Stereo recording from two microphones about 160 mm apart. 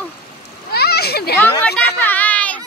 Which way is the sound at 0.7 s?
80° left.